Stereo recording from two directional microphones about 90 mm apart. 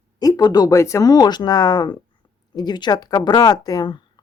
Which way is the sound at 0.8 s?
35° left (ahead or behind).